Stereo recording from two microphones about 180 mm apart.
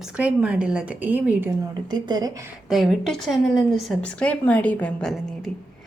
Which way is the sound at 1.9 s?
25° right (ahead or behind).